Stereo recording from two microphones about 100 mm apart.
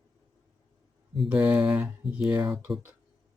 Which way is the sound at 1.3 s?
15° right (ahead or behind).